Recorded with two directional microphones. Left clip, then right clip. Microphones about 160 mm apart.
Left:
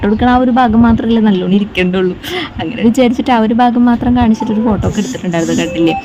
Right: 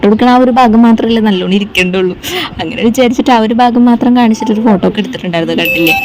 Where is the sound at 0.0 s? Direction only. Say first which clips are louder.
Right 4 dB; 25° right (ahead or behind).